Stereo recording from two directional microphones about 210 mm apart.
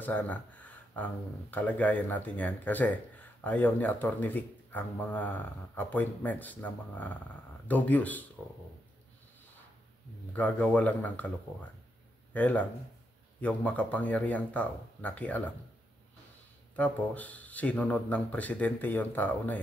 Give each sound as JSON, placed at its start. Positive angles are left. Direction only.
{"t": 0.0, "sound": "speech", "side_deg": 10}
{"t": 10.3, "sound": "speech", "side_deg": 5}
{"t": 16.7, "sound": "speech", "side_deg": 5}